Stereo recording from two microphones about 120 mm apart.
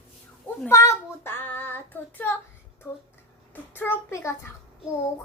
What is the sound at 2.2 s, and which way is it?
Speech, 15° left (ahead or behind).